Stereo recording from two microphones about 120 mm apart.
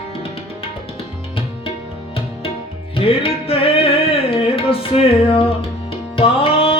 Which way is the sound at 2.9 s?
50° left (ahead or behind).